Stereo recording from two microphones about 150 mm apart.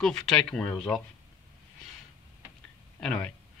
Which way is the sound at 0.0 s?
5° left (ahead or behind).